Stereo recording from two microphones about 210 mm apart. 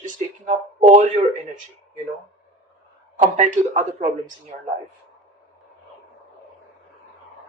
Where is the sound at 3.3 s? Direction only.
35° right (ahead or behind).